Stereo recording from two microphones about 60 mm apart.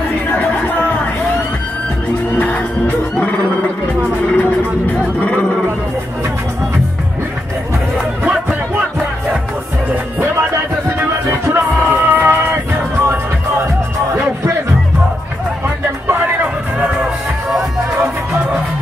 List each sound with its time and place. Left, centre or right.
0.5 s a sound: left
2.3 s music: left
4.4 s music: left
11.0 s music: right